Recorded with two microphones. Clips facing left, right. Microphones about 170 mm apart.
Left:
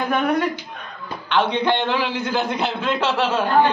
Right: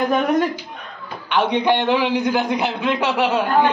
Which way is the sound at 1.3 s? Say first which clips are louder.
Right 2 dB; 15° right (ahead or behind).